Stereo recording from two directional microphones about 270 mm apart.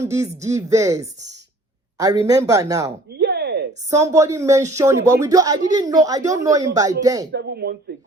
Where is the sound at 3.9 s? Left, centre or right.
Centre.